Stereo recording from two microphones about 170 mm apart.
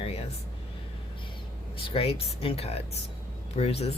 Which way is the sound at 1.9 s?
35° left (ahead or behind).